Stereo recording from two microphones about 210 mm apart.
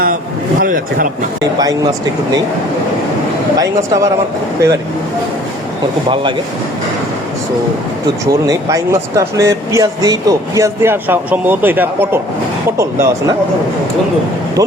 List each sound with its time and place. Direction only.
0.6 s speech: 40° right (ahead or behind)
1.5 s speech: 15° right (ahead or behind)
3.6 s speech: 15° right (ahead or behind)
8.3 s speech: 15° right (ahead or behind)